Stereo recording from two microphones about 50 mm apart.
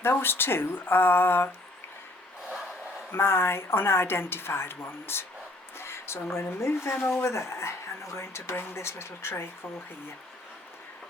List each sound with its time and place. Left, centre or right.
0.0 s a woman's voice: left
3.1 s a woman's voice: left
5.7 s a sound: left
6.3 s speech: left